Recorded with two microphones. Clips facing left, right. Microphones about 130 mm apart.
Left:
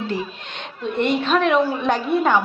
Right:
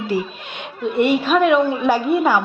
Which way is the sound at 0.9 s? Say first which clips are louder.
Right 3 dB; 10° right (ahead or behind).